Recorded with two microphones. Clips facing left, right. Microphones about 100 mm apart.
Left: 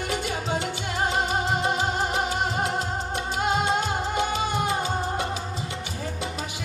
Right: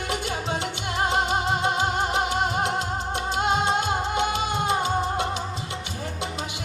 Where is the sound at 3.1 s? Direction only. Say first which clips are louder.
Right 2 dB; 25° right (ahead or behind).